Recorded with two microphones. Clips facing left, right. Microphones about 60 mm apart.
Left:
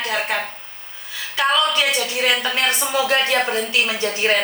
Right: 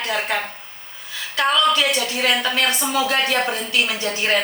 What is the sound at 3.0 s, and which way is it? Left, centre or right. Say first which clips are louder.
A woman's voice: left 3 dB; left.